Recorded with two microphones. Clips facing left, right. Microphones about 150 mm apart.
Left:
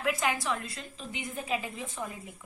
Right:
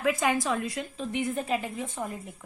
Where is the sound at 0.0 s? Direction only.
55° right (ahead or behind).